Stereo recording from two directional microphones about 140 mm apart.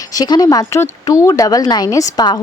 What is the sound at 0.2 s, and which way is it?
Speech, 30° left (ahead or behind).